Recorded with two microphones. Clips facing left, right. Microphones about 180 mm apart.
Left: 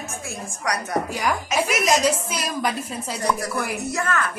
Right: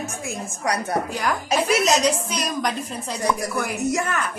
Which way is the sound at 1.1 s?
10° left (ahead or behind).